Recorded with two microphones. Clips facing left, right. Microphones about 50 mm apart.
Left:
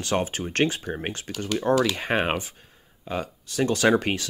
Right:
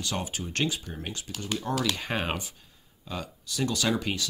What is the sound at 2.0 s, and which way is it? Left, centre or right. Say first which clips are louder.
Speech: left 6 dB; left.